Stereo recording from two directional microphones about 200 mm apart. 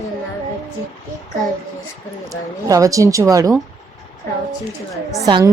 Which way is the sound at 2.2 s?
15° right (ahead or behind).